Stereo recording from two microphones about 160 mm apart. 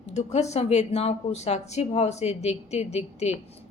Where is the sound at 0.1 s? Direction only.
45° left (ahead or behind).